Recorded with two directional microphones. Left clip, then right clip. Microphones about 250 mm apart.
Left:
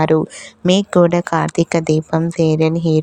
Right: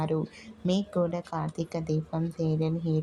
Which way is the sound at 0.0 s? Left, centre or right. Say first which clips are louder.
Left 16 dB; left.